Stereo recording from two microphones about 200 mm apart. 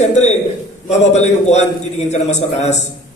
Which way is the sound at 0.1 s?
35° left (ahead or behind).